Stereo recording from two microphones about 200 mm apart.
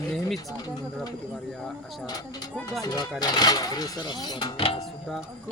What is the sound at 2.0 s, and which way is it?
Speech, 20° left (ahead or behind).